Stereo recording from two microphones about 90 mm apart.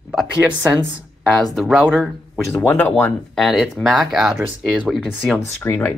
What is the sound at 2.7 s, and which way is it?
Speech, 20° left (ahead or behind).